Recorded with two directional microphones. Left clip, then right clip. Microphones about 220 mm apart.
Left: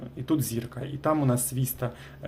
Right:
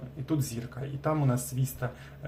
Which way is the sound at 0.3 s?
40° left (ahead or behind).